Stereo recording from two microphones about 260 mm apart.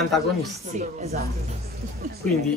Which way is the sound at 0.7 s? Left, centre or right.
Right.